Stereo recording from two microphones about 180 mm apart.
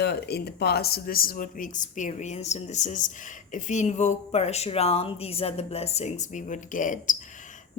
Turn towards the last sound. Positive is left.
turn(degrees=45)  # may be behind; listen again after turning